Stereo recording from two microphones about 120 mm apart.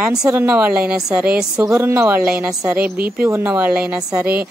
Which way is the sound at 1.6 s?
25° right (ahead or behind).